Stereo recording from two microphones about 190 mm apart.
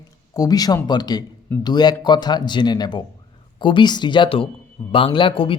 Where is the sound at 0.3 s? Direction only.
20° left (ahead or behind).